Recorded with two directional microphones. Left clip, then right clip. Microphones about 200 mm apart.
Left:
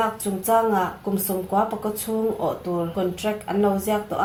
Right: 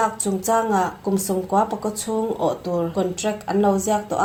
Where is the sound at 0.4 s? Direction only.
35° right (ahead or behind).